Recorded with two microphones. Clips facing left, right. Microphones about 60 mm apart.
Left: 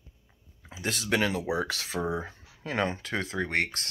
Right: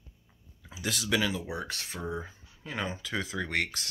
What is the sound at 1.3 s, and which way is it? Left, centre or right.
Speech, left.